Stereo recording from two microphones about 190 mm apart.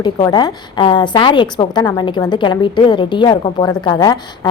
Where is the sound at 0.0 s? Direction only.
20° left (ahead or behind).